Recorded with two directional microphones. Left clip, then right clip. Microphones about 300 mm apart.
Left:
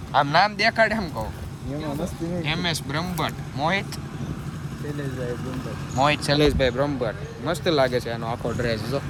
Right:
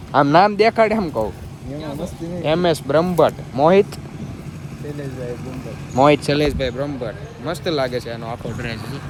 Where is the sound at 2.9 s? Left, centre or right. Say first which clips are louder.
Right 12 dB; right.